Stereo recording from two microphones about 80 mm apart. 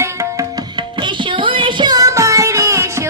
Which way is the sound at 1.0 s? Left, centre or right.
Right.